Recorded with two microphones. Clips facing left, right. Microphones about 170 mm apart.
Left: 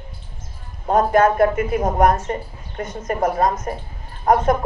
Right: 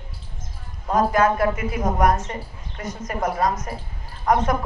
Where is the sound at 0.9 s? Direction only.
55° left (ahead or behind).